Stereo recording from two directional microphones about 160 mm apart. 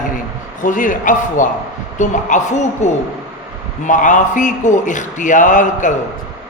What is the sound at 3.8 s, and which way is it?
A man's voice, 55° left (ahead or behind).